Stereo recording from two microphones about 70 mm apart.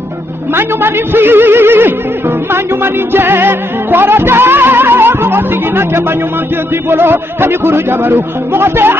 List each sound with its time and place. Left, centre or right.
0.6 s music: right